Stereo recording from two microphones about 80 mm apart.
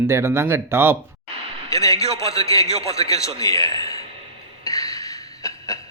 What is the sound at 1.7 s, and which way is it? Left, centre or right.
Speech, left.